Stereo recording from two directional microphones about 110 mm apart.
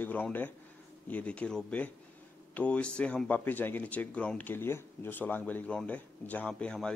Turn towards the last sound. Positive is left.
turn(degrees=10)  # may be behind; listen again after turning